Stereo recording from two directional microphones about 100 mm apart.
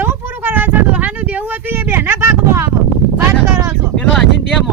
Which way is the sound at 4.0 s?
5° left (ahead or behind).